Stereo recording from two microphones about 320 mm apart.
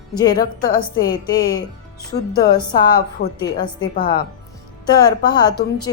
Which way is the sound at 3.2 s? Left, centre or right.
Left.